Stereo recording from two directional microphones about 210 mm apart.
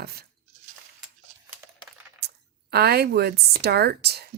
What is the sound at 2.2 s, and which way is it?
Speech, 50° right (ahead or behind).